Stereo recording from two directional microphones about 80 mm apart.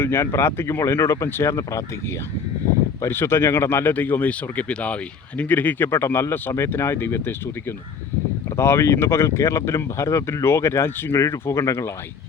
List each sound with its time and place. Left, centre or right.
0.0 s speech: left
3.0 s speech: left
8.4 s speech: left